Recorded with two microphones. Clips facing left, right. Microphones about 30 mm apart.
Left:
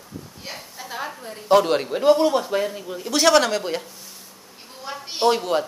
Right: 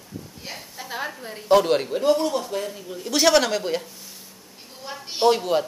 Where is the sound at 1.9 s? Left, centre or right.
Centre.